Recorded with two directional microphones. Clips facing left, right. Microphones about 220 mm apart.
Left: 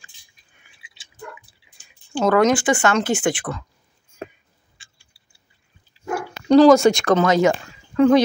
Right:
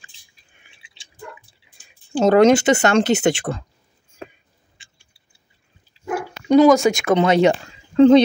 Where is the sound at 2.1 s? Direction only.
25° right (ahead or behind).